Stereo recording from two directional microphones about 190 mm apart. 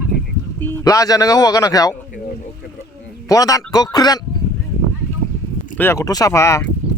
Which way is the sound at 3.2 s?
20° left (ahead or behind).